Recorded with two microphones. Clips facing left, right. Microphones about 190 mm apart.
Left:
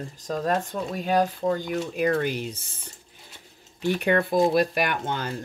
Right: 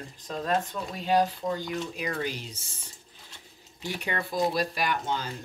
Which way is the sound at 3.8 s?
55° left (ahead or behind).